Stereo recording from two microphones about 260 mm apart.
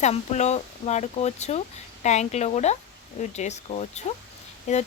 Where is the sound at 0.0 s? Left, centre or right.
Left.